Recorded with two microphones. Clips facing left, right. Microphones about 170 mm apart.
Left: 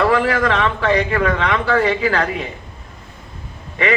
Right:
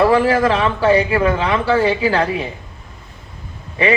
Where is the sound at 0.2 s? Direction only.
30° right (ahead or behind).